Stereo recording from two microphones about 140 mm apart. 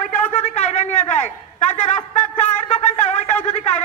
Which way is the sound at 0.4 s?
50° left (ahead or behind).